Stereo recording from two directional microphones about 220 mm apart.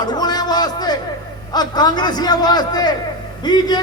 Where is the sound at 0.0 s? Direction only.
20° left (ahead or behind).